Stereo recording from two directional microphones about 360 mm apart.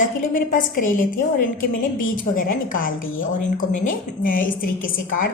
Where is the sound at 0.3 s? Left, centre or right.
Left.